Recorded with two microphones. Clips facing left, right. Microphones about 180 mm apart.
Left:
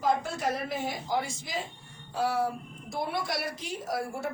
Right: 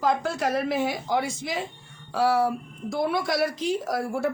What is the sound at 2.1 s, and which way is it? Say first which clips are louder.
A woman's voice: right 6 dB; 85° right.